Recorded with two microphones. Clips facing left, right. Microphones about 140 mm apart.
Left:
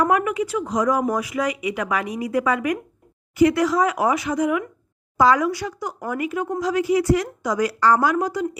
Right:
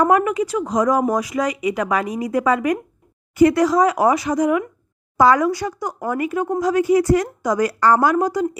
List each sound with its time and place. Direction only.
0.0 s speech: 40° right (ahead or behind)
5.1 s a woman's voice: 50° right (ahead or behind)